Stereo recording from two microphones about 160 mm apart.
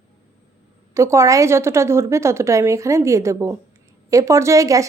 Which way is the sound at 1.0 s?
20° right (ahead or behind).